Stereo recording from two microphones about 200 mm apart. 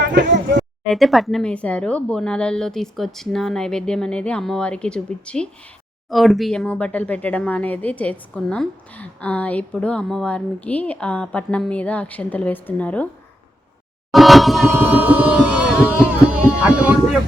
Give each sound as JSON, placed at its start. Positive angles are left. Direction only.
{"t": 0.0, "sound": "speech", "side_deg": -60}
{"t": 0.9, "sound": "speech", "side_deg": 0}
{"t": 14.1, "sound": "speech", "side_deg": 0}
{"t": 16.6, "sound": "speech", "side_deg": -5}